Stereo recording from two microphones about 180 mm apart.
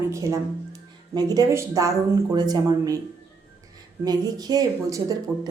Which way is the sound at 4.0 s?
20° right (ahead or behind).